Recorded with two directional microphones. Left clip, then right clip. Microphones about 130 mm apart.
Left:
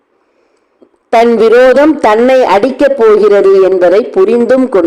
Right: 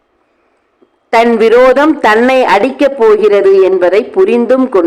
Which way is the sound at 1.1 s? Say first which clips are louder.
Left 1 dB; 30° left (ahead or behind).